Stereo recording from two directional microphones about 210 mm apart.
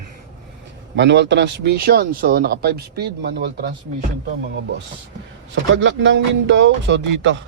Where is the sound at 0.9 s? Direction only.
55° right (ahead or behind).